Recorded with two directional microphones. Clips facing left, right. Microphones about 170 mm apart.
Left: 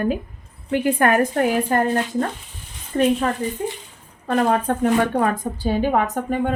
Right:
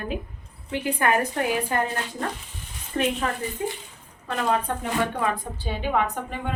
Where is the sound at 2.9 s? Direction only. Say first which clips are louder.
Left 6 dB; 30° left (ahead or behind).